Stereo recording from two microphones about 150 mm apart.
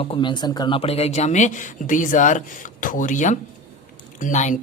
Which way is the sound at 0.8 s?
45° left (ahead or behind).